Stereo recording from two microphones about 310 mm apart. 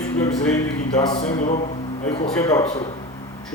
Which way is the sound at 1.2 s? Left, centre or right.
Left.